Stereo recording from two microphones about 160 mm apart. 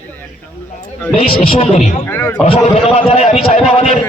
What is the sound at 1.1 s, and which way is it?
Speech, 35° left (ahead or behind).